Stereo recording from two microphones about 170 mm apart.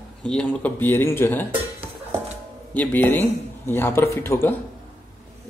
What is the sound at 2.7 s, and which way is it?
Speech, 10° left (ahead or behind).